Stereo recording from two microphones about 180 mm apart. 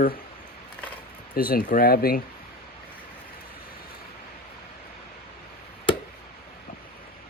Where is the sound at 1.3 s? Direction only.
55° left (ahead or behind).